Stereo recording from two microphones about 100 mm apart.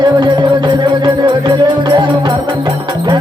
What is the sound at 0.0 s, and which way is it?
Music, 45° right (ahead or behind).